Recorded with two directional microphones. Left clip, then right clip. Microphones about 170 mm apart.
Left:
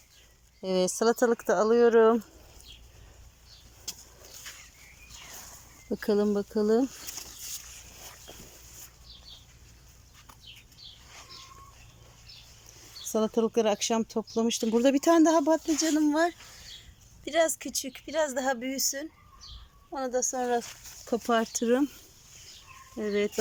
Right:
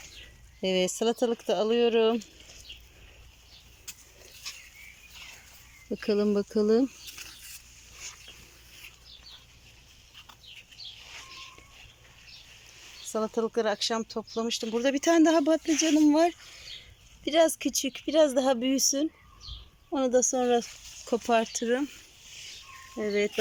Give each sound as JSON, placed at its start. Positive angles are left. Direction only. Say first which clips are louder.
{"t": 0.6, "sound": "speech", "louder": "left 1 dB", "side_deg": 0}
{"t": 5.9, "sound": "speech", "louder": "even", "side_deg": 0}
{"t": 13.1, "sound": "speech", "louder": "left 2 dB", "side_deg": 10}
{"t": 15.0, "sound": "speech", "louder": "right 2 dB", "side_deg": 0}
{"t": 21.1, "sound": "speech", "louder": "right 1 dB", "side_deg": 0}
{"t": 23.0, "sound": "speech", "louder": "right 1 dB", "side_deg": 0}